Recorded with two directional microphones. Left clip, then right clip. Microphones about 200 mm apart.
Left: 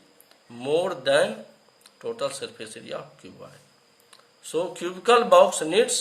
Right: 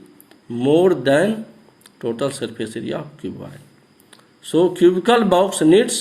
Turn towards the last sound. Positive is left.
turn(degrees=-15)  # may be behind; listen again after turning